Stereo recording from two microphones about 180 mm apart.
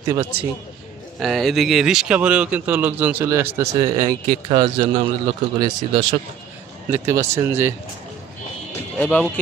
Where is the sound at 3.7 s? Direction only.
25° right (ahead or behind).